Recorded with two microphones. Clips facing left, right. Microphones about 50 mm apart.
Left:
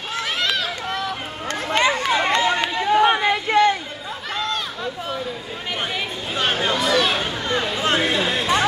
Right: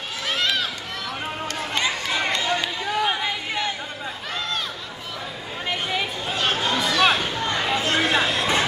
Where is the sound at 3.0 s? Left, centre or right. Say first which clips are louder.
Left 7 dB; left.